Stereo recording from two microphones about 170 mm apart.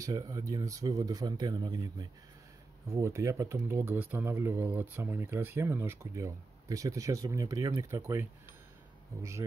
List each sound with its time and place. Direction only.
0.0 s speech: 20° right (ahead or behind)